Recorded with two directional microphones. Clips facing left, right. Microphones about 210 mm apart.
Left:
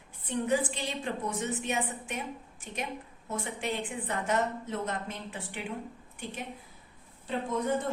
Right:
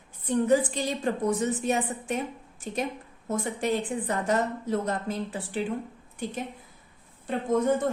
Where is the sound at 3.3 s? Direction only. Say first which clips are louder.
Right 7 dB; 40° right (ahead or behind).